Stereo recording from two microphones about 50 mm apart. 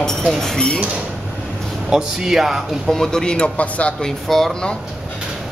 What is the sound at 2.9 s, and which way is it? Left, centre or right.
Speech, centre.